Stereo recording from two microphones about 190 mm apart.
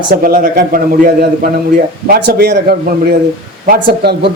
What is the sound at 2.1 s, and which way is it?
A man's voice, 55° right (ahead or behind).